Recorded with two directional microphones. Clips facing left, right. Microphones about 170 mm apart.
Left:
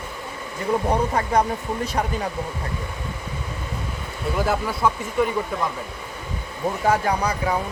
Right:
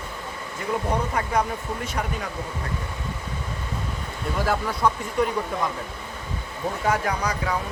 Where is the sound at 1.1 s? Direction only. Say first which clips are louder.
Left 4 dB; 35° left (ahead or behind).